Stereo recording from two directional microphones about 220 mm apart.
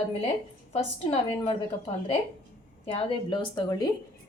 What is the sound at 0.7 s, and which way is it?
A woman's voice, 25° left (ahead or behind).